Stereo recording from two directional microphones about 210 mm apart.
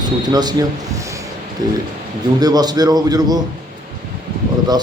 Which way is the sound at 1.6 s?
15° right (ahead or behind).